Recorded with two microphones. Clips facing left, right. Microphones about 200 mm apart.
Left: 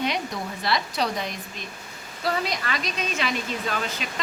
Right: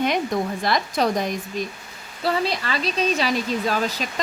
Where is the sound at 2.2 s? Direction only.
30° right (ahead or behind).